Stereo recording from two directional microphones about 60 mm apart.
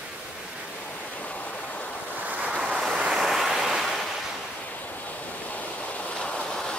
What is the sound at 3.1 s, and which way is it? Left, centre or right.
Waves, centre.